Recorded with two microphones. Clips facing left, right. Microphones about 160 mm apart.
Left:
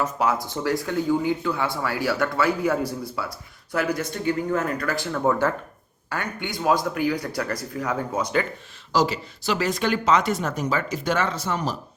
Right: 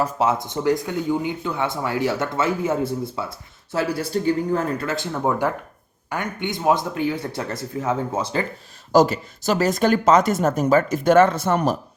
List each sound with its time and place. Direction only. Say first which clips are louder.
0.0 s speech: right 2 dB; 25° right (ahead or behind)
8.9 s speech: right 6 dB; 50° right (ahead or behind)